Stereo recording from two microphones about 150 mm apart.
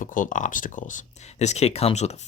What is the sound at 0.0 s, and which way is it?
Speech, 60° left (ahead or behind).